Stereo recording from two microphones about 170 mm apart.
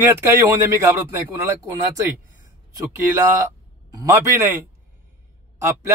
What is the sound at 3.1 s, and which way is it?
Speech, 20° right (ahead or behind).